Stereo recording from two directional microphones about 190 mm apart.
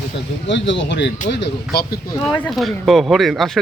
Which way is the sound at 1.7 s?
55° left (ahead or behind).